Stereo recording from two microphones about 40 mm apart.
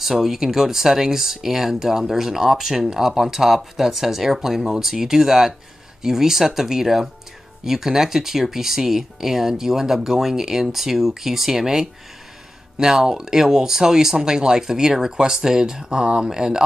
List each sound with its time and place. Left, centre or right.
0.0 s speech: centre